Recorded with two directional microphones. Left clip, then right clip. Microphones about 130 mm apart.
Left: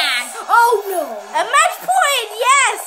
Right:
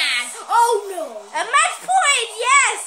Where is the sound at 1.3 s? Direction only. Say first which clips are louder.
Left 3 dB; 45° left (ahead or behind).